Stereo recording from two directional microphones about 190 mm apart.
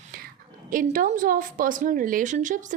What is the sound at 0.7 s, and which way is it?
A woman's voice, 45° right (ahead or behind).